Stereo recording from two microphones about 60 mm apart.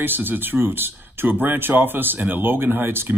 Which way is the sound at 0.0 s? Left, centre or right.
Right.